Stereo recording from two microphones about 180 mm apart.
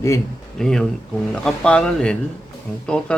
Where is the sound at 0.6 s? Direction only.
5° left (ahead or behind).